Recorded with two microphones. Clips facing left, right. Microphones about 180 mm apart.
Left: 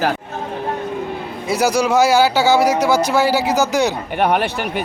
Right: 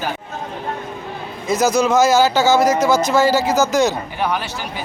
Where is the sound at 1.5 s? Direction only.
10° left (ahead or behind).